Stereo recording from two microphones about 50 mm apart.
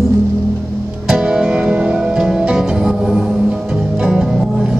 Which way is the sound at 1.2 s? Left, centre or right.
Centre.